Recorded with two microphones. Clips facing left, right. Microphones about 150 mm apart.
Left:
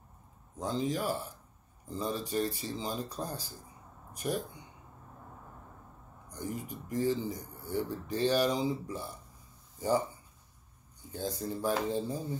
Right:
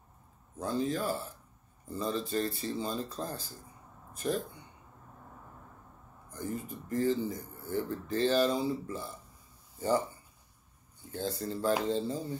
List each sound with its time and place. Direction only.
0.6 s speech: 15° left (ahead or behind)
6.4 s speech: 15° left (ahead or behind)
11.1 s speech: 10° left (ahead or behind)